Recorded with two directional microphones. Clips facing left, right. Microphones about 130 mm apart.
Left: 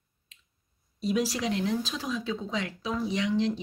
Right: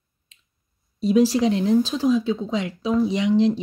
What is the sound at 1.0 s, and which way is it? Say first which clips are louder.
Speech: right 10 dB; 30° right (ahead or behind).